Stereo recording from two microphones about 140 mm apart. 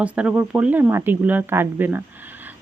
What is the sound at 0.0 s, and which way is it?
Speech, 10° right (ahead or behind).